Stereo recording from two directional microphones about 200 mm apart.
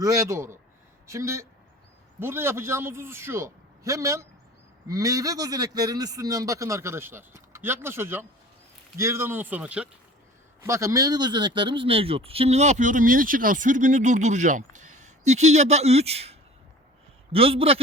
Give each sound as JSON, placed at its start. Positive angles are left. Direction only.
{"t": 0.0, "sound": "a man's voice", "side_deg": -15}